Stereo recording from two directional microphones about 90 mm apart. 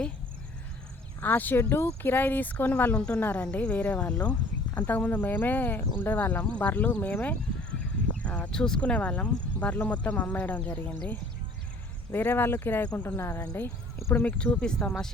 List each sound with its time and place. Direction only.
1.2 s speech: 20° left (ahead or behind)
14.8 s speech: 25° left (ahead or behind)